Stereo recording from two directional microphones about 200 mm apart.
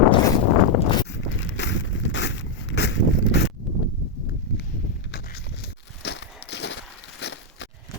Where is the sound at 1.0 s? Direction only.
65° left (ahead or behind).